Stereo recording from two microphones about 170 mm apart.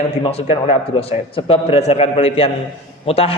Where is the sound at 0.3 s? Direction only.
35° left (ahead or behind).